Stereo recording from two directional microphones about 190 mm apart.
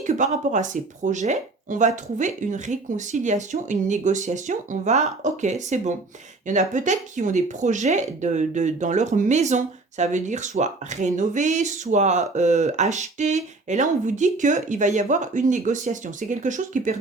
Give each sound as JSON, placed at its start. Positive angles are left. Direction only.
{"t": 0.0, "sound": "speech", "side_deg": -40}